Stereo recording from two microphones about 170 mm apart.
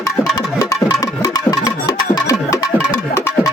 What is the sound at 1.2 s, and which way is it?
Music, 20° left (ahead or behind).